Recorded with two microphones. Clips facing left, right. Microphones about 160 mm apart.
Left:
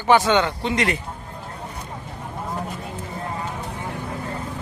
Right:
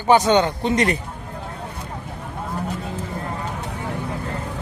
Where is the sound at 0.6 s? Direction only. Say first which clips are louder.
Right 3 dB; 40° right (ahead or behind).